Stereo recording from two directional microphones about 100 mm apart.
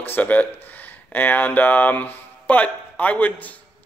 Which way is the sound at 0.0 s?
20° left (ahead or behind).